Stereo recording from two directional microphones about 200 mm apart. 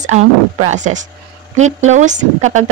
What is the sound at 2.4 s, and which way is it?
Speech, 90° right.